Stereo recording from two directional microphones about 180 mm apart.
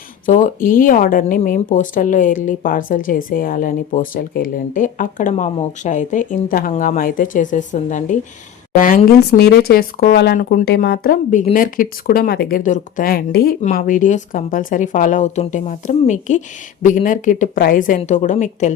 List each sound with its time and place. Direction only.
0.3 s speech: 45° left (ahead or behind); by 10.3 s 70° left (ahead or behind)
10.3 s speech: 50° left (ahead or behind)